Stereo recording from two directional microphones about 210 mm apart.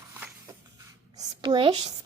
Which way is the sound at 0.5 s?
15° right (ahead or behind).